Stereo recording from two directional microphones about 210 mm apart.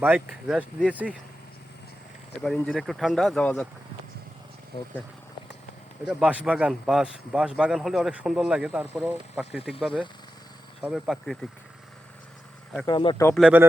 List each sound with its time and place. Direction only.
0.0 s speech: 5° right (ahead or behind)
2.4 s speech: centre (ahead or behind)
6.1 s speech: 5° right (ahead or behind)
10.8 s speech: 5° right (ahead or behind)
12.8 s speech: 20° left (ahead or behind)
13.4 s speech: 10° right (ahead or behind)